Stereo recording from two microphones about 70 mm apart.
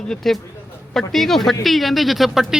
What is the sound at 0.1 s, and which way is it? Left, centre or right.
A man's voice, centre.